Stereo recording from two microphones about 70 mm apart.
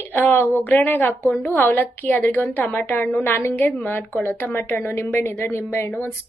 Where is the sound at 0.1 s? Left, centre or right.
Left.